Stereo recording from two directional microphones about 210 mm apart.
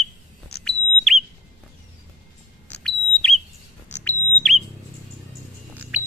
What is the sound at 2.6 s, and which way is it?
Smoke detector, centre (ahead or behind).